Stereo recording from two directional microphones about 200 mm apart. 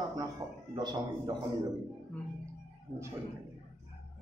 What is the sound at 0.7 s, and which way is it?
Speech, 20° right (ahead or behind).